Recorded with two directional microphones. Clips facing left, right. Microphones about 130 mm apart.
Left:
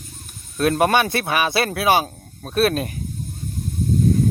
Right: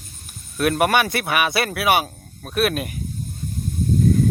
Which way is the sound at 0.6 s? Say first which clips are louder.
Left 1 dB; 25° left (ahead or behind).